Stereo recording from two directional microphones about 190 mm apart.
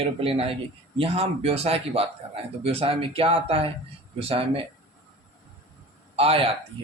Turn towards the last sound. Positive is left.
turn(degrees=-30)  # may be behind; listen again after turning